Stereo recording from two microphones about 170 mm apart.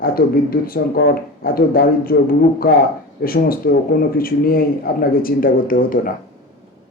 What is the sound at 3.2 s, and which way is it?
A man's voice, 60° left (ahead or behind).